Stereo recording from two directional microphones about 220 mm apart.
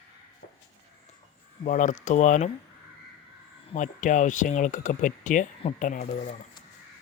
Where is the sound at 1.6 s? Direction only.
35° left (ahead or behind).